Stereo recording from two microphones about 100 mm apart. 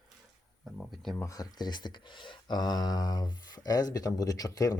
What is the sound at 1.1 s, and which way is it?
Speech, 35° left (ahead or behind).